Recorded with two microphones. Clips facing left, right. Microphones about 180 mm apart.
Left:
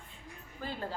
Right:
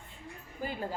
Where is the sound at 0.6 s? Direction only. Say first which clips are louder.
Right 3 dB; 10° right (ahead or behind).